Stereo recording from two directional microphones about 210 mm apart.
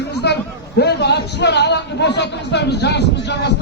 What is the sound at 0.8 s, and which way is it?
A man's voice, 50° left (ahead or behind).